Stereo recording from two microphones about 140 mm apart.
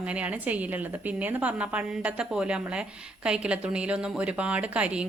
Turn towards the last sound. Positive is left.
turn(degrees=-10)  # may be behind; listen again after turning